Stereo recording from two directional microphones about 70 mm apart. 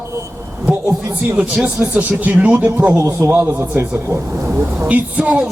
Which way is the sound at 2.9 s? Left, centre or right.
Right.